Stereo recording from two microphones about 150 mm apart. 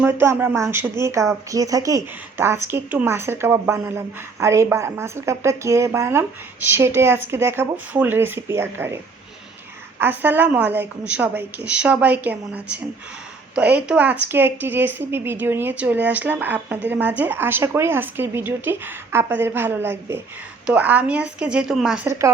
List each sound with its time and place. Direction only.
0.0 s speech: 15° right (ahead or behind)
10.0 s speech: 10° right (ahead or behind)